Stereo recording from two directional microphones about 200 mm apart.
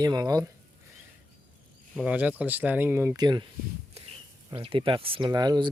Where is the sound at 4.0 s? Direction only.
30° right (ahead or behind).